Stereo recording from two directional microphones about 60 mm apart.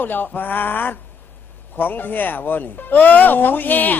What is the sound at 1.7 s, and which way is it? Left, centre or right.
Speech, left.